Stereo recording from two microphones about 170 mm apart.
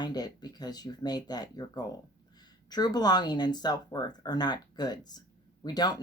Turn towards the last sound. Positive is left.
turn(degrees=25)  # may be behind; listen again after turning